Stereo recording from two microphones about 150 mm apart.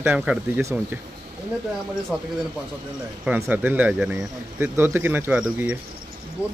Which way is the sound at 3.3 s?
15° right (ahead or behind).